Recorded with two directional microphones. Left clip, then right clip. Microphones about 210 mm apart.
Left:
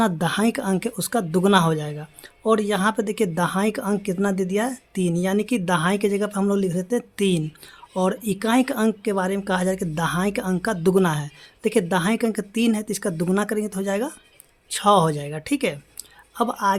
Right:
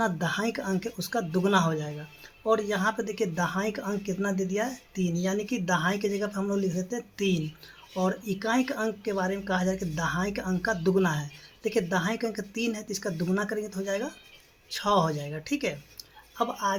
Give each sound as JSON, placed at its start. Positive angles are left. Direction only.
{"t": 0.0, "sound": "a woman's voice", "side_deg": 45}